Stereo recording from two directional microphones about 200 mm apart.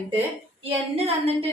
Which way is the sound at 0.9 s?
30° right (ahead or behind).